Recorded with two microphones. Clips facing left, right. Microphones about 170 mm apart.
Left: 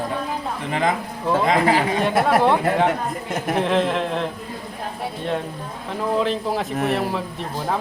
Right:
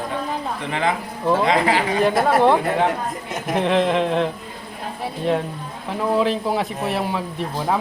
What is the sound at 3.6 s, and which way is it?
Speech, centre (ahead or behind).